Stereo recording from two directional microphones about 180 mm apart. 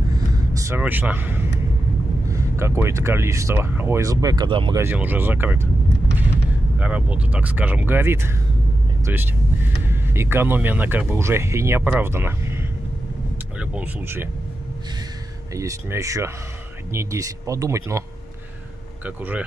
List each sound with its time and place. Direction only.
0.5 s speech: 15° right (ahead or behind)
4.7 s speech: 10° right (ahead or behind)
6.8 s speech: 5° right (ahead or behind)
15.5 s speech: 15° right (ahead or behind)
19.0 s speech: 10° right (ahead or behind)